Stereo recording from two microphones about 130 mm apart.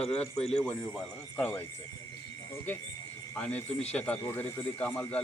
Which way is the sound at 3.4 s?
10° left (ahead or behind).